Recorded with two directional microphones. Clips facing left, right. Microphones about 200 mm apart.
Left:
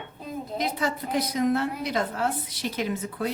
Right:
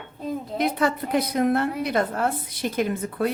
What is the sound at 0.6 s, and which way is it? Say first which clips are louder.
A woman's voice: right 6 dB; 60° right (ahead or behind).